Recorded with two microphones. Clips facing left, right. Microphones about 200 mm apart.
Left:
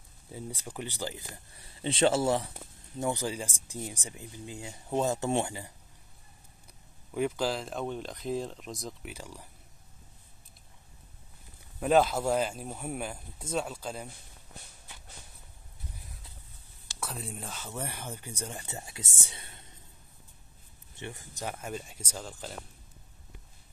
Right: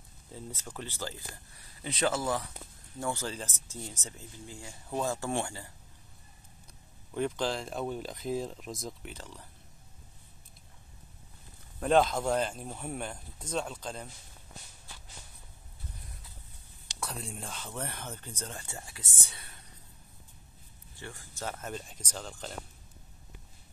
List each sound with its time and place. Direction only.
0.7 s speech: 15° left (ahead or behind)
3.0 s speech: 15° left (ahead or behind)
7.1 s speech: 5° left (ahead or behind)
9.1 s speech: 10° left (ahead or behind)
11.8 s speech: 5° left (ahead or behind)
17.0 s speech: centre (ahead or behind); by 19.0 s 20° left (ahead or behind)
19.2 s whispering: 25° left (ahead or behind)
20.9 s speech: 20° left (ahead or behind); by 22.6 s 5° left (ahead or behind)